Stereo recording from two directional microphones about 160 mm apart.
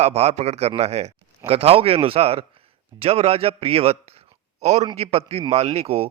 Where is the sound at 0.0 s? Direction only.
40° right (ahead or behind).